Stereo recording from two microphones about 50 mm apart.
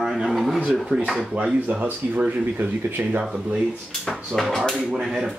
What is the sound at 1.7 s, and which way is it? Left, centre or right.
Speech, right.